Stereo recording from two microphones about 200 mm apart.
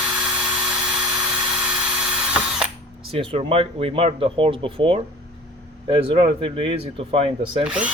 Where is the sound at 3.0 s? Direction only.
25° right (ahead or behind).